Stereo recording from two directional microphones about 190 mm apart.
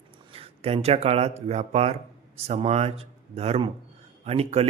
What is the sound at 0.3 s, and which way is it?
Speech, 30° right (ahead or behind).